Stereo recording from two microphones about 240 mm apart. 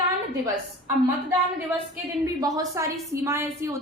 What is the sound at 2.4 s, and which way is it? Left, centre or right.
A woman's voice, centre.